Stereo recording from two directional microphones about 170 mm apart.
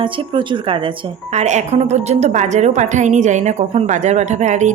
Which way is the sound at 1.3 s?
40° right (ahead or behind).